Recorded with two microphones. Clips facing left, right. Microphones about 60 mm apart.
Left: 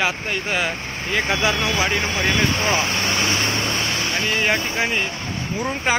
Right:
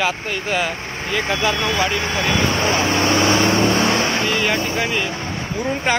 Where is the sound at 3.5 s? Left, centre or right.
Right.